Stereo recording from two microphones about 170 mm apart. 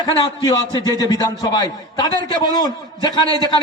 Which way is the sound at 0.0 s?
25° left (ahead or behind).